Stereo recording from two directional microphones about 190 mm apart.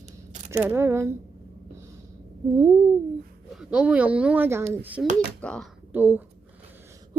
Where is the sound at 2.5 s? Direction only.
20° right (ahead or behind).